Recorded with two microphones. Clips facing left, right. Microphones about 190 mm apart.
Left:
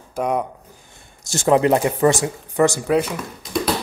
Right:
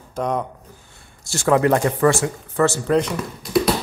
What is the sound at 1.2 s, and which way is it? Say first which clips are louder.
Speech: left 1 dB; 20° left (ahead or behind).